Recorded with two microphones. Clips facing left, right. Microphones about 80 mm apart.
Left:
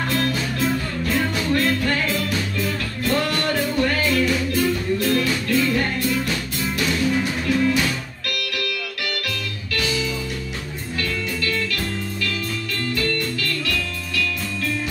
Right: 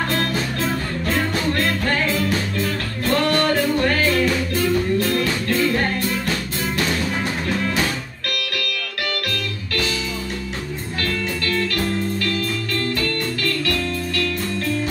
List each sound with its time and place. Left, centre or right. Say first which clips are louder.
0.1 s music: even; right